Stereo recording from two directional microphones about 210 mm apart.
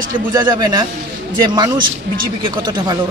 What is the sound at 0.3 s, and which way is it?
A man's voice, 20° right (ahead or behind).